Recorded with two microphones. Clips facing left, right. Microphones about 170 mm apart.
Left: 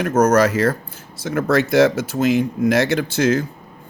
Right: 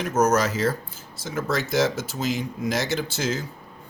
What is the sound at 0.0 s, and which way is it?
Speech, 55° left (ahead or behind).